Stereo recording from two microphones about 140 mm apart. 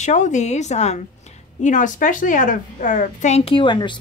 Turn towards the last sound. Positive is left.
turn(degrees=35)  # may be behind; listen again after turning